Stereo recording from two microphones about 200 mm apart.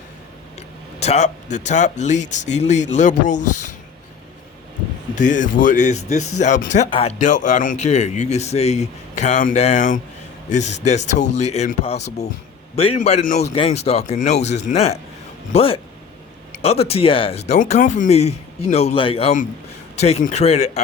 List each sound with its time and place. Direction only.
0.9 s speech: 35° left (ahead or behind)
5.1 s a man's voice: 40° left (ahead or behind)